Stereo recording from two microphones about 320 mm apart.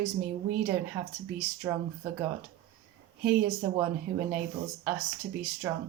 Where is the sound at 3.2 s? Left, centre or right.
Centre.